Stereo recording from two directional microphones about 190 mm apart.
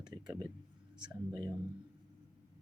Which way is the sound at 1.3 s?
20° right (ahead or behind).